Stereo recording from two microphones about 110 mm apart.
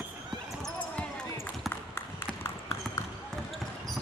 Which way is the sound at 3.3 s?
Centre (ahead or behind).